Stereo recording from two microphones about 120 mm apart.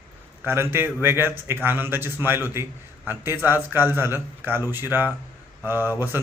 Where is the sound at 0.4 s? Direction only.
20° right (ahead or behind).